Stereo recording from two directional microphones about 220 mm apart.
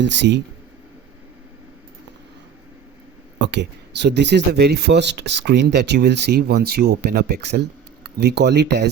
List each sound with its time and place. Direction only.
0.0 s speech: 55° right (ahead or behind)
3.3 s speech: 55° right (ahead or behind)